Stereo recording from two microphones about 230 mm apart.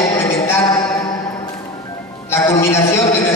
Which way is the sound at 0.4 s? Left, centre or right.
Centre.